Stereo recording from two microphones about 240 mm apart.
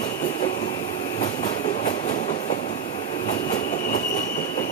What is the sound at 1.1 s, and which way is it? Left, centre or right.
Train, left.